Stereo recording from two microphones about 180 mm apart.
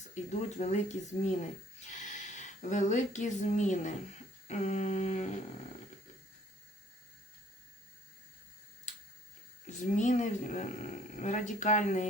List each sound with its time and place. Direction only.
0.1 s speech: 40° left (ahead or behind)
9.8 s speech: 45° left (ahead or behind)